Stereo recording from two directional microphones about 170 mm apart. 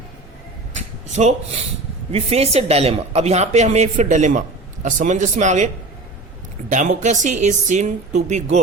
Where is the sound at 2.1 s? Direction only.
35° right (ahead or behind).